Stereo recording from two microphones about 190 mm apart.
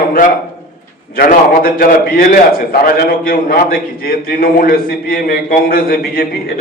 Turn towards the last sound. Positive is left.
turn(degrees=50)  # may be behind; listen again after turning